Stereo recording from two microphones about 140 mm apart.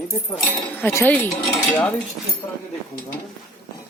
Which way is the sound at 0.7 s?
15° left (ahead or behind).